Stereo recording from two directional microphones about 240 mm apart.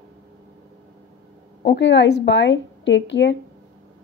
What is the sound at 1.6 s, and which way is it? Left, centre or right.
Speech, left.